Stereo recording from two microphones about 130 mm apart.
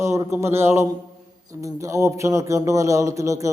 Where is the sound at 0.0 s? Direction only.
20° right (ahead or behind).